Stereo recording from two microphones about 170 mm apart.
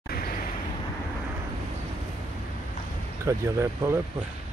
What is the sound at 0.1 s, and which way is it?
Vehicle, 60° left (ahead or behind).